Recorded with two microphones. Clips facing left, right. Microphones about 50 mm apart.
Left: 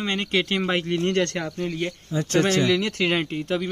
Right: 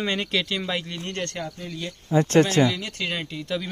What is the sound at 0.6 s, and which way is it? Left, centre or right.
Speech, left.